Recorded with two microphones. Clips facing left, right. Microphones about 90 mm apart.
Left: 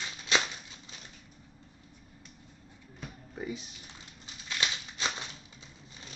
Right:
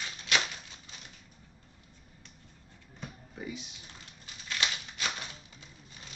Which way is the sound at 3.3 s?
30° left (ahead or behind).